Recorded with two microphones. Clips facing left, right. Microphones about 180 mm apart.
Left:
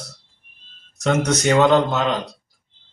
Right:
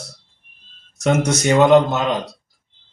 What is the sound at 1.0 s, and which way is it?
A man's voice, 10° right (ahead or behind).